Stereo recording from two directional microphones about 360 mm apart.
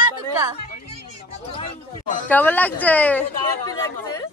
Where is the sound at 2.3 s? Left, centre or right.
Centre.